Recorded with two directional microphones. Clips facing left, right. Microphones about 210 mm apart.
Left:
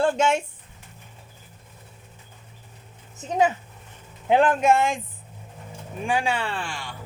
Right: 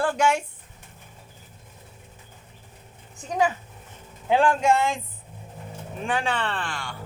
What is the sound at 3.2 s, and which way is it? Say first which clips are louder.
Speech: left 2 dB; 25° left (ahead or behind).